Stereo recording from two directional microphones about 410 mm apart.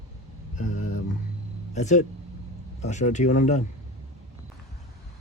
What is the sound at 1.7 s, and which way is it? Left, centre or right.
Speech, centre.